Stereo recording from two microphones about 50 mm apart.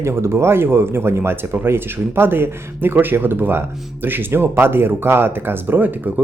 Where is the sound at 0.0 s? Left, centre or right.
Right.